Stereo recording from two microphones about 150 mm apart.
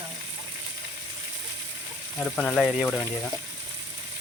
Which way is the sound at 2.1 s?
10° left (ahead or behind).